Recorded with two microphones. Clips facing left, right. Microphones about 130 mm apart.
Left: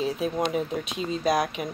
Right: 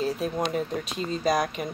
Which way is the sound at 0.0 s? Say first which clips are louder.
Left 1 dB; centre (ahead or behind).